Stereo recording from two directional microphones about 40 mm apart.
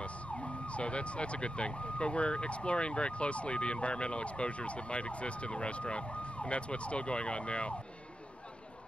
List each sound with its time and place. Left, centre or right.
0.0 s emergency vehicle: left